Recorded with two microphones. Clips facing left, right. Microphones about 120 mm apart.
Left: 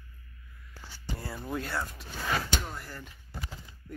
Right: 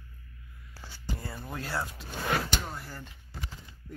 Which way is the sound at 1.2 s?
5° left (ahead or behind).